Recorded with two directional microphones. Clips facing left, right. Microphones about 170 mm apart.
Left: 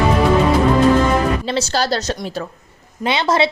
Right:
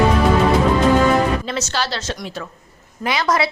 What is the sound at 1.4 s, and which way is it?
Speech, 30° left (ahead or behind).